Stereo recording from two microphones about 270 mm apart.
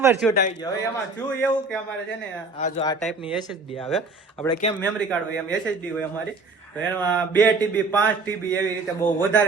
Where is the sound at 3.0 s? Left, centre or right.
Centre.